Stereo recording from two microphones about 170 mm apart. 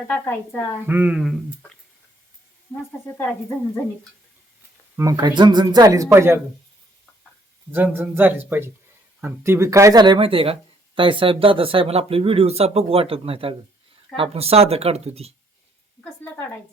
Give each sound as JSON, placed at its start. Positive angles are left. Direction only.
{"t": 0.1, "sound": "a woman's voice", "side_deg": 10}
{"t": 0.9, "sound": "speech", "side_deg": -10}
{"t": 4.9, "sound": "speech", "side_deg": -20}
{"t": 7.7, "sound": "speech", "side_deg": -10}